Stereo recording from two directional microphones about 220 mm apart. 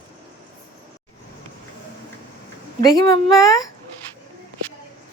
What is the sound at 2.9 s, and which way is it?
Speech, 20° left (ahead or behind).